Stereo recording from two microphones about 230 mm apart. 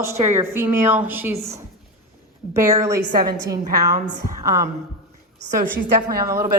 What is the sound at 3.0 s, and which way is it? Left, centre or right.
Speech, right.